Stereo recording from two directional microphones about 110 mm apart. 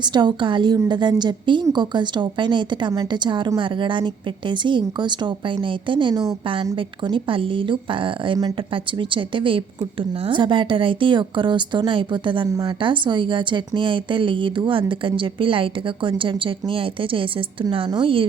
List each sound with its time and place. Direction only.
0.0 s speech: 40° right (ahead or behind)